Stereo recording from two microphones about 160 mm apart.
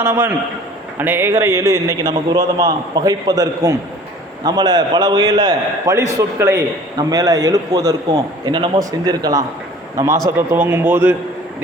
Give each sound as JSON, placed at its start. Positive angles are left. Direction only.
{"t": 0.0, "sound": "a man's voice", "side_deg": -15}